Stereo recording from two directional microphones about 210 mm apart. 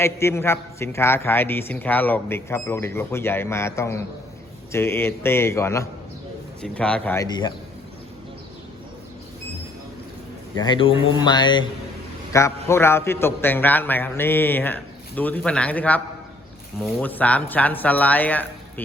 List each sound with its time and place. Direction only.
0.0 s a man's voice: 10° left (ahead or behind)
10.5 s a man's voice: 20° left (ahead or behind)